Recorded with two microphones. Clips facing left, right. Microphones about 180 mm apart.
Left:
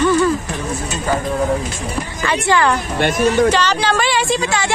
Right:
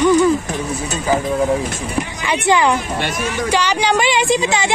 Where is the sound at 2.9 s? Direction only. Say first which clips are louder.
Left 7 dB; 50° left (ahead or behind).